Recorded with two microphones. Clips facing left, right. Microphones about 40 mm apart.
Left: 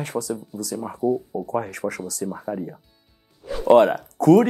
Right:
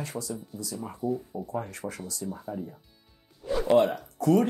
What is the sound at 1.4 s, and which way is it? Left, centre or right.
Speech, left.